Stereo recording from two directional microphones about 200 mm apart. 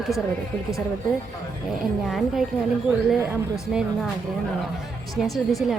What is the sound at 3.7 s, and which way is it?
Speech, 5° right (ahead or behind).